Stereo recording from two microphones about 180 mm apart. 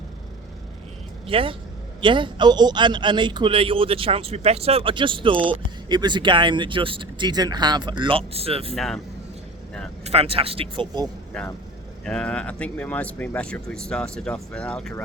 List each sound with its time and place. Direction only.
1.3 s a man's voice: 30° right (ahead or behind)
8.7 s speech: centre (ahead or behind)
10.0 s speech: 35° right (ahead or behind)
12.0 s speech: 5° left (ahead or behind)